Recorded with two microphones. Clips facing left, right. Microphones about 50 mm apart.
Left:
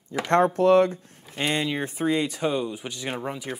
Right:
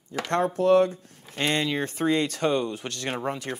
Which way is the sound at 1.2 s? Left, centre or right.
Centre.